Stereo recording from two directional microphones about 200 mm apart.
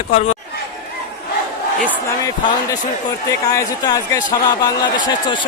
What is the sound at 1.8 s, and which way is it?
Speech, 10° left (ahead or behind).